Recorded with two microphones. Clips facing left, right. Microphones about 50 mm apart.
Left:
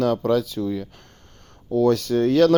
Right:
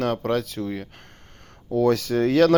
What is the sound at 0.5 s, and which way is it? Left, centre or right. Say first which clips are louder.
Speech: left 4 dB; right.